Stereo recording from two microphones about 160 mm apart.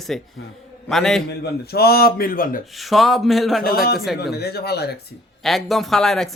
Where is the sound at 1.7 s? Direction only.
75° left (ahead or behind).